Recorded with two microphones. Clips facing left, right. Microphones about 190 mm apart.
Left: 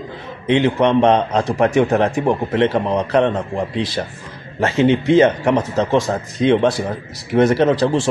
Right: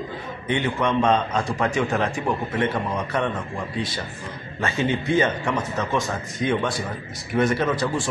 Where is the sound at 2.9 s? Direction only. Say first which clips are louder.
Left 9 dB; 75° left (ahead or behind).